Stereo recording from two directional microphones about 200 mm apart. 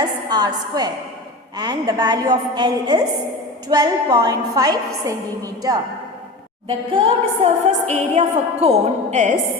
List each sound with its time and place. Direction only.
0.0 s a woman's voice: 20° right (ahead or behind)
6.7 s a woman's voice: 25° right (ahead or behind)